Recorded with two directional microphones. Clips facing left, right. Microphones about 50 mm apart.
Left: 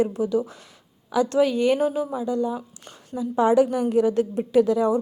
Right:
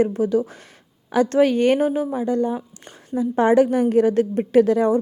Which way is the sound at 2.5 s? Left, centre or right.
Right.